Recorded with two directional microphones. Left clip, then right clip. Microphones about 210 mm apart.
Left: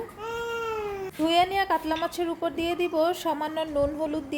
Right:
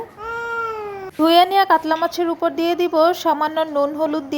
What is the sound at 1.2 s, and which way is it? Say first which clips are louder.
A woman's voice: right 10 dB; 20° right (ahead or behind).